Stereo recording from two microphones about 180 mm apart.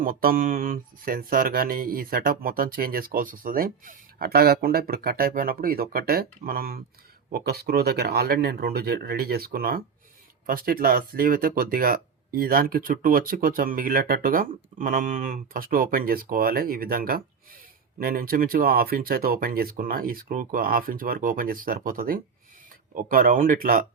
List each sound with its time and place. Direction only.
0.0 s speech: 55° right (ahead or behind)